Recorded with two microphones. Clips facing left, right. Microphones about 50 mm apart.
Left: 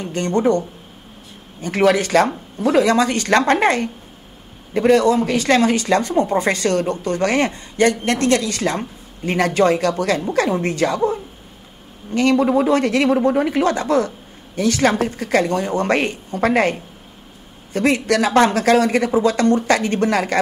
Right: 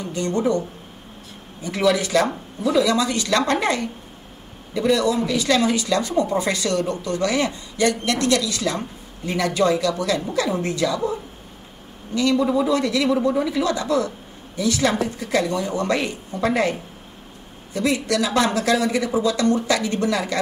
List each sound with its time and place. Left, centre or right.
0.0 s speech: left
12.1 s speech: left
17.7 s speech: left